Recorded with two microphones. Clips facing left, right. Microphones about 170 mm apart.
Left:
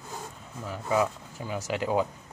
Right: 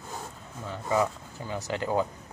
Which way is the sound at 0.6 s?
10° left (ahead or behind).